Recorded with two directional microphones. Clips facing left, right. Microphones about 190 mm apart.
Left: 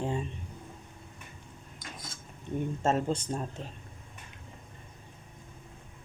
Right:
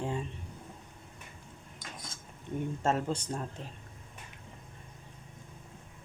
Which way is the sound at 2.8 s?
20° left (ahead or behind).